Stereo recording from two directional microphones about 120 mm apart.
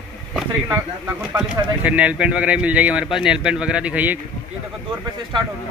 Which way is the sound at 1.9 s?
10° right (ahead or behind).